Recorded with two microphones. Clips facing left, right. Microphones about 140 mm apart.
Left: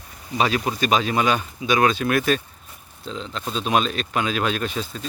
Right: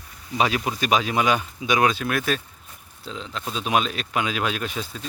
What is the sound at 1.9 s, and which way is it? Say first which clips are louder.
Speech: left 4 dB; centre (ahead or behind).